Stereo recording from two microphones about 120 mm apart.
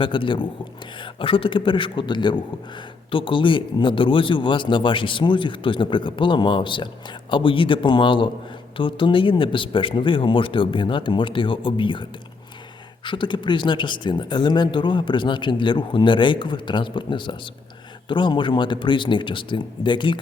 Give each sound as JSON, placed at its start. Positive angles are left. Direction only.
{"t": 0.0, "sound": "a man's voice", "side_deg": 45}
{"t": 13.1, "sound": "a man's voice", "side_deg": 40}